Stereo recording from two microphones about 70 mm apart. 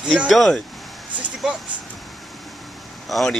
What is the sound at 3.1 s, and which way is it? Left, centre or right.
Speech, centre.